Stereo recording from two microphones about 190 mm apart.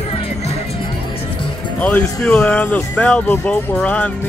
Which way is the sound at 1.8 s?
10° left (ahead or behind).